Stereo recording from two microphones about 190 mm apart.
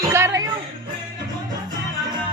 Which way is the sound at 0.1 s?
15° right (ahead or behind).